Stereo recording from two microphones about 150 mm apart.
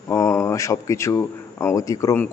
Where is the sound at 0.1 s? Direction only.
20° left (ahead or behind).